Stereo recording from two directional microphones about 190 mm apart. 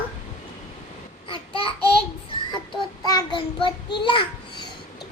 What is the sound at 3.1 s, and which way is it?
A child's voice, 25° left (ahead or behind).